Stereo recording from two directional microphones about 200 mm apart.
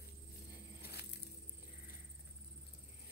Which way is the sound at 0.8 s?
50° left (ahead or behind).